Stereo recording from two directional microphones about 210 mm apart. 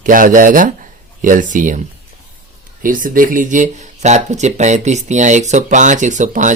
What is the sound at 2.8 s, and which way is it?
Speech, 40° right (ahead or behind).